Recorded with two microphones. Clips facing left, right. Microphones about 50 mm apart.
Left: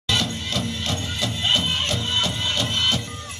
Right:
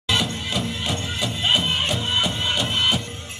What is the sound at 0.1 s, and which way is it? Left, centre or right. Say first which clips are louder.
Music: right 1 dB; centre.